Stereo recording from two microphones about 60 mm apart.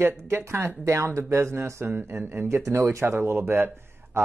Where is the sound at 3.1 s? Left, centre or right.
Right.